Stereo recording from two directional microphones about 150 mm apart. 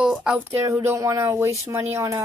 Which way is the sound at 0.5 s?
15° right (ahead or behind).